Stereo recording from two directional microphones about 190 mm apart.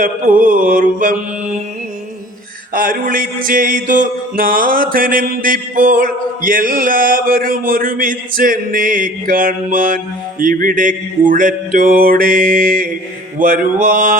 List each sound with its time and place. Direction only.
0.0 s mantra: 45° right (ahead or behind)
2.7 s mantra: 50° right (ahead or behind)